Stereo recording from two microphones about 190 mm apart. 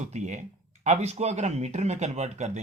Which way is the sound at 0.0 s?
40° right (ahead or behind).